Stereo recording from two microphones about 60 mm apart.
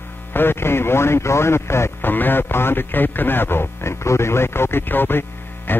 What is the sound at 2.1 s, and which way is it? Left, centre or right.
Speech, left.